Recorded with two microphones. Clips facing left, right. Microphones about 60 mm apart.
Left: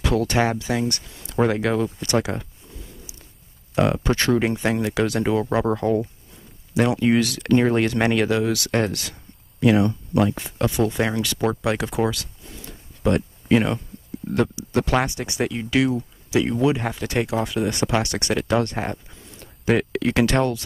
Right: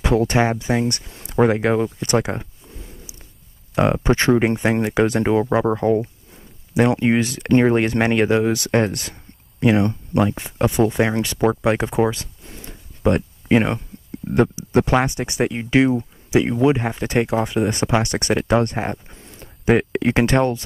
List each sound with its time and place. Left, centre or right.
0.0 s speech: right
3.7 s speech: right
10.1 s speech: right
12.4 s a sound: right
13.0 s speech: right
18.9 s a sound: right
19.4 s speech: right